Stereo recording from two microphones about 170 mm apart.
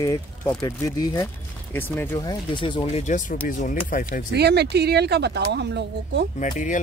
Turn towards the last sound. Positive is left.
turn(degrees=50)  # may be behind; listen again after turning